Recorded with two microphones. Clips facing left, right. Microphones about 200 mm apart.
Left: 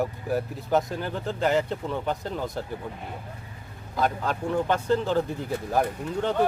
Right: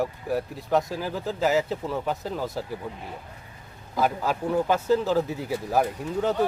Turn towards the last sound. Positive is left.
turn(degrees=-5)  # may be behind; listen again after turning